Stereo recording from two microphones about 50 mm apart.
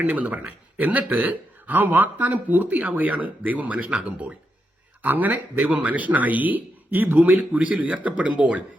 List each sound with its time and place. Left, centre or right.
0.0 s speech: right
7.8 s speech: right